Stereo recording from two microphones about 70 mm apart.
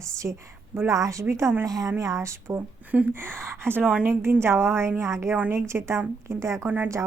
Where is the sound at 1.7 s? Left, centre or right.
Right.